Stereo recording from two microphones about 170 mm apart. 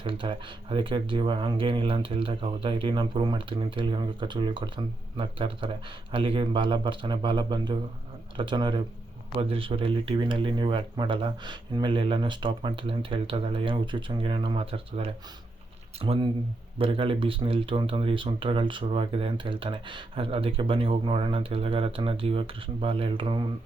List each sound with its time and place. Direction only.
0.0 s speech: 30° right (ahead or behind)